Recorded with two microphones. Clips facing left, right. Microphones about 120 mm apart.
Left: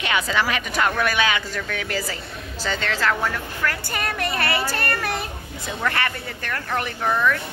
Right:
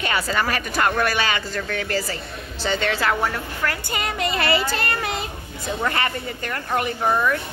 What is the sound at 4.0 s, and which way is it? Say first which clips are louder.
Speech: right 1 dB; 60° left (ahead or behind).